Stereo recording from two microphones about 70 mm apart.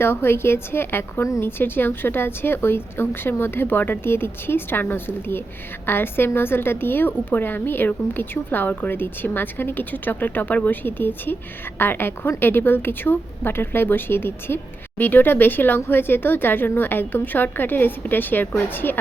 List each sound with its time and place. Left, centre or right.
0.0 s a woman's voice: left